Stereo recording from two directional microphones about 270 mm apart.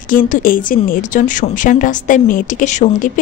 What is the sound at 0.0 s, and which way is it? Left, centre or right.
A woman's voice, left.